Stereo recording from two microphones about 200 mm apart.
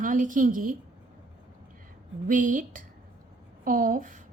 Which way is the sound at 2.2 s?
40° right (ahead or behind).